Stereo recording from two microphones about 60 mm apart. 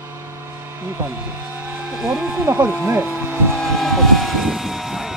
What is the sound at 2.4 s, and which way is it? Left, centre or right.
Speech, right.